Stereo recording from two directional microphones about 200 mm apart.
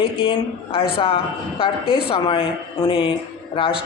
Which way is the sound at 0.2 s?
25° left (ahead or behind).